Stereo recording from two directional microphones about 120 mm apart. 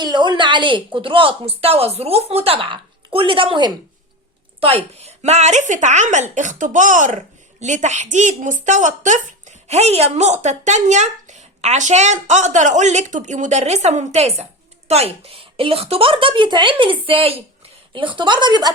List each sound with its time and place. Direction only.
0.0 s a woman's voice: 40° right (ahead or behind)
4.6 s a woman's voice: 60° right (ahead or behind); by 18.7 s 40° right (ahead or behind)